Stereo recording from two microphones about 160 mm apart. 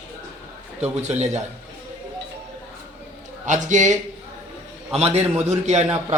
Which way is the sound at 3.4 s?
50° right (ahead or behind).